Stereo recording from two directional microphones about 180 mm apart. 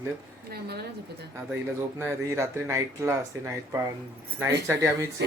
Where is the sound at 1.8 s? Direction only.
15° right (ahead or behind).